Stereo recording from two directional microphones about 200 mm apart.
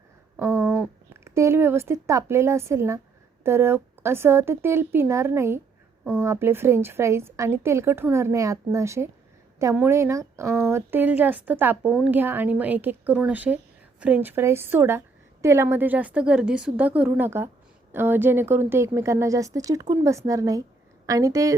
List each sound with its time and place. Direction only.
0.3 s a woman's voice: 15° right (ahead or behind)